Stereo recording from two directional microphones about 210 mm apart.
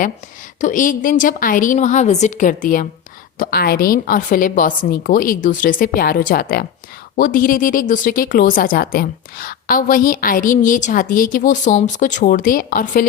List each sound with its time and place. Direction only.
0.6 s a woman's voice: 40° left (ahead or behind)